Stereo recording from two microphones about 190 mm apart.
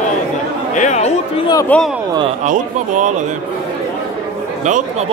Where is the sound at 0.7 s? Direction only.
35° left (ahead or behind).